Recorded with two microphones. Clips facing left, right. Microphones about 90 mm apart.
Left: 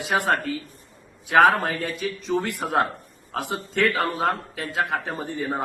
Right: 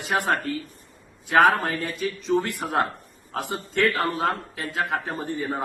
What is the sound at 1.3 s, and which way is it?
A man's voice, centre (ahead or behind).